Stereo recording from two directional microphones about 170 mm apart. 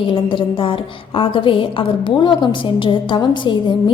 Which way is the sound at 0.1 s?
30° left (ahead or behind).